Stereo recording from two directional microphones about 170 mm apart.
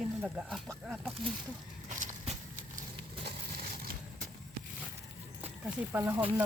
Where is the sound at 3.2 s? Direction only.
60° right (ahead or behind).